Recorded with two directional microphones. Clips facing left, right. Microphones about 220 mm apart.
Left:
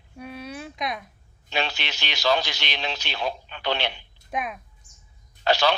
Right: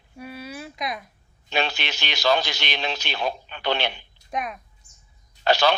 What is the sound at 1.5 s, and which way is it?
A man's voice, 50° right (ahead or behind).